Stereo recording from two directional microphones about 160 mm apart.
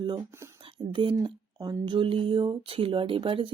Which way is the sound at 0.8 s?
30° right (ahead or behind).